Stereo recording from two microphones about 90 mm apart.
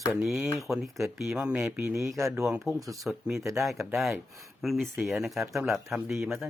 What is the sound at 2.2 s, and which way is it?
Speech, 35° right (ahead or behind).